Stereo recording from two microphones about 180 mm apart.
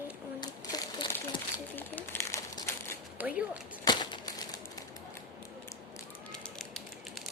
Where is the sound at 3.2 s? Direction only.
10° right (ahead or behind).